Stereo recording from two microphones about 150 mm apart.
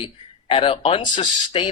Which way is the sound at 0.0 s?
40° left (ahead or behind).